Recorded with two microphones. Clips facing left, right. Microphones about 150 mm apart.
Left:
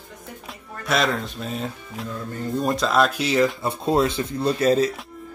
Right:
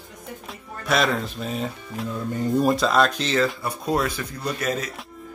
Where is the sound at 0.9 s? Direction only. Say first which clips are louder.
Even; centre (ahead or behind).